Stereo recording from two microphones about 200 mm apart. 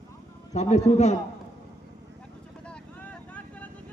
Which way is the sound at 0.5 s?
35° left (ahead or behind).